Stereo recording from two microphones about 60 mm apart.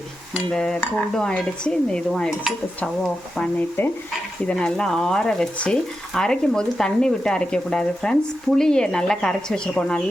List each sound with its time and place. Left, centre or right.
0.5 s speech: centre
3.8 s stir: left
4.6 s speech: centre